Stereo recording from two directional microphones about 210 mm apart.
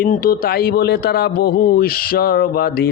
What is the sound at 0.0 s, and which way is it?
Speech, 45° left (ahead or behind).